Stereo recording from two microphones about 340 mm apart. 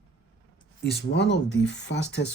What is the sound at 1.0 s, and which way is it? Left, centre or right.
A man's voice, left.